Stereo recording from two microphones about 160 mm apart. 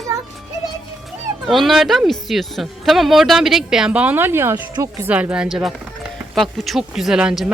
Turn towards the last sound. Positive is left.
turn(degrees=-5)  # may be behind; listen again after turning